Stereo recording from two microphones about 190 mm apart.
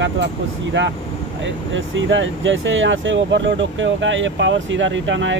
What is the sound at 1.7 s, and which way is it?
Speech, 80° right.